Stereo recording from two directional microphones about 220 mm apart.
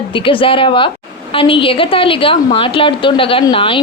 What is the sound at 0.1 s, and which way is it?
A woman's voice, 25° left (ahead or behind).